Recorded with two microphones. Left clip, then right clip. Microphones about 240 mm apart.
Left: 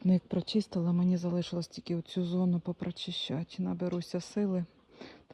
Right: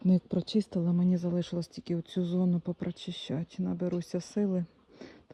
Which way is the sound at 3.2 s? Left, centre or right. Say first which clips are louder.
Right 1 dB; centre.